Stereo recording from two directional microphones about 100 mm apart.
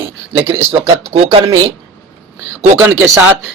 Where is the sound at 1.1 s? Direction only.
75° right (ahead or behind).